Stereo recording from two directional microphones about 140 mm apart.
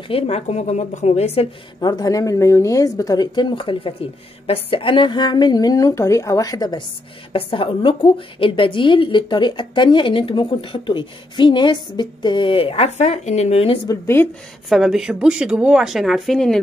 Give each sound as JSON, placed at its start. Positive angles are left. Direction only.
{"t": 0.1, "sound": "a woman's voice", "side_deg": 50}
{"t": 1.8, "sound": "speech", "side_deg": 30}
{"t": 7.3, "sound": "a woman's voice", "side_deg": 40}
{"t": 13.8, "sound": "speech", "side_deg": 20}
{"t": 14.7, "sound": "a woman's voice", "side_deg": -5}